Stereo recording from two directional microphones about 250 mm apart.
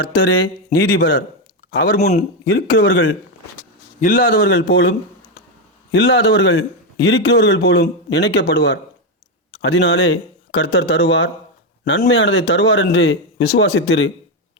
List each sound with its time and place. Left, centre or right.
0.0 s a man's voice: left
2.4 s speech: left
4.0 s a man's voice: left
4.4 s speech: left